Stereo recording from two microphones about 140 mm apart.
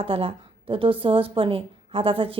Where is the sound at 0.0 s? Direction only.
40° right (ahead or behind).